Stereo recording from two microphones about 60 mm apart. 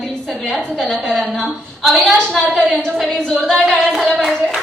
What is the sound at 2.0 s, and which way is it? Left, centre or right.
A woman's voice, centre.